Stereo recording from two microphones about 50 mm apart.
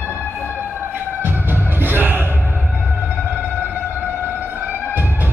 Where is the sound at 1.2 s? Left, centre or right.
Right.